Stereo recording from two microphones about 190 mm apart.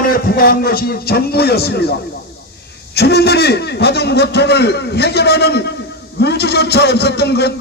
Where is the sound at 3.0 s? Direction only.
60° left (ahead or behind).